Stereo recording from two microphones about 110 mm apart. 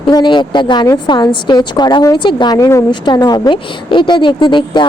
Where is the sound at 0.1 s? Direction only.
40° left (ahead or behind).